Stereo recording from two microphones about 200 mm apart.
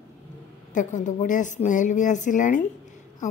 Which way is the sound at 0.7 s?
40° left (ahead or behind).